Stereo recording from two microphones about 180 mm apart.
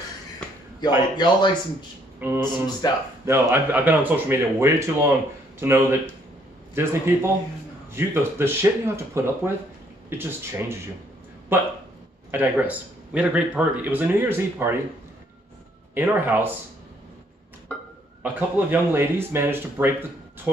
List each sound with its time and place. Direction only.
0.7 s a man's voice: 25° left (ahead or behind)
2.1 s speech: 10° right (ahead or behind)
2.8 s a man's voice: 20° left (ahead or behind)
3.3 s speech: 15° right (ahead or behind)
15.9 s speech: 10° right (ahead or behind)
18.2 s speech: 10° right (ahead or behind)